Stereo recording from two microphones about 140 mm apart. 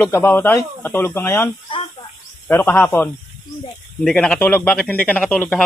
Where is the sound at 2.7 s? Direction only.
15° left (ahead or behind).